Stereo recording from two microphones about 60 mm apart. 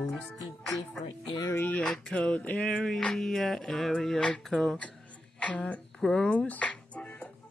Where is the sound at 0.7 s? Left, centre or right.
Centre.